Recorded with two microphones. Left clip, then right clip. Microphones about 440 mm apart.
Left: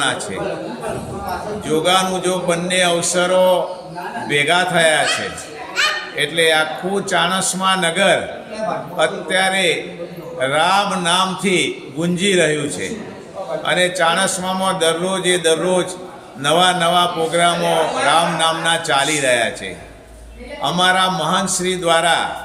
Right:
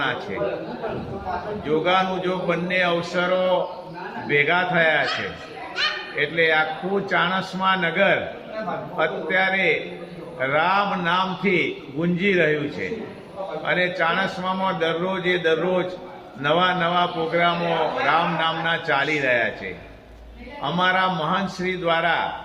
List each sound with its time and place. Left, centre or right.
1.8 s a man's voice: right
5.8 s speech: right
6.1 s a man's voice: right
20.6 s a man's voice: right